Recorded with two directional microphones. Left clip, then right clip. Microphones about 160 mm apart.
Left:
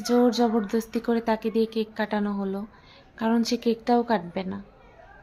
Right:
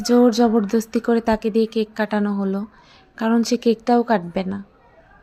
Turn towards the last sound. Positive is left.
turn(degrees=-30)  # may be behind; listen again after turning